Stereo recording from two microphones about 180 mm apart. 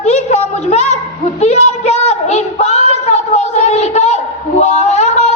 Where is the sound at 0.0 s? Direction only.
35° left (ahead or behind).